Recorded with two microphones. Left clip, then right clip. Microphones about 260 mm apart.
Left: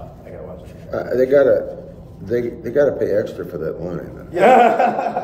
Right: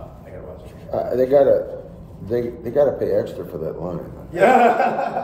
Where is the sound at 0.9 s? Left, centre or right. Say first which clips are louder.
Left 1 dB; centre.